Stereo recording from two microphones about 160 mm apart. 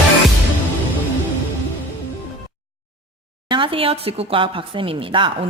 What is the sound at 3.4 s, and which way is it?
Speech, 30° right (ahead or behind).